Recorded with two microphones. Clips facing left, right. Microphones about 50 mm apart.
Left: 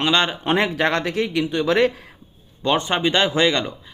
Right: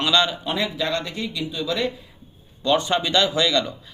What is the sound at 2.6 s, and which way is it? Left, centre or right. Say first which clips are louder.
Speech: left 1 dB; left.